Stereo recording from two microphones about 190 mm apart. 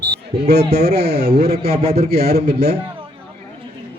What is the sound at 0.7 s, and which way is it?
A man's voice, 60° right (ahead or behind).